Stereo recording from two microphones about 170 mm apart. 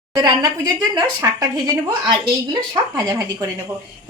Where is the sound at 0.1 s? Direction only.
25° right (ahead or behind).